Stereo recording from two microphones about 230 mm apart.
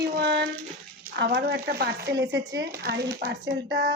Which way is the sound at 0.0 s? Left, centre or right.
Right.